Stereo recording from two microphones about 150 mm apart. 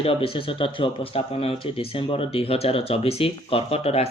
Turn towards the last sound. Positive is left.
turn(degrees=45)  # may be behind; listen again after turning